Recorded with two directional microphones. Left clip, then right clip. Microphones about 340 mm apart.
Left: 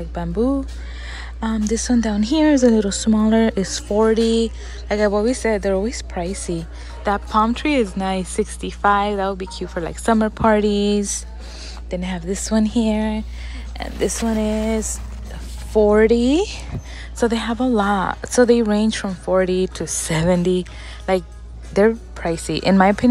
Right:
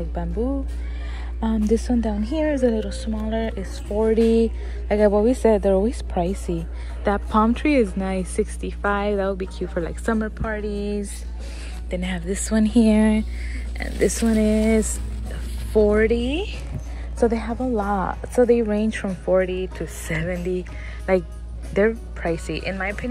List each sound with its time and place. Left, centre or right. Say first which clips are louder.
0.1 s a woman's voice: left 7 dB; centre
16.3 s speech: left 8 dB; left
17.2 s a woman's voice: left 2 dB; centre
19.4 s speech: left 6 dB; left
19.8 s a woman's voice: left 6 dB; centre
21.7 s speech: left 4 dB; centre
22.5 s speech: left 8 dB; left
22.8 s a woman's voice: left 12 dB; centre